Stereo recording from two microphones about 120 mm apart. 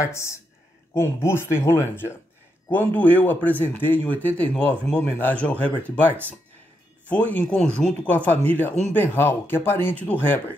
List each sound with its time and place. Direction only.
0.0 s speech: 25° left (ahead or behind)
7.1 s speech: 10° left (ahead or behind)